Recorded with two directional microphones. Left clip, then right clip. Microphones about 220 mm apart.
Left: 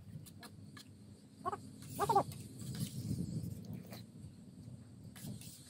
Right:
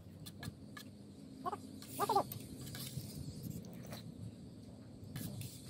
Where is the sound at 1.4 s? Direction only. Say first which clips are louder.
Left 1 dB; 20° left (ahead or behind).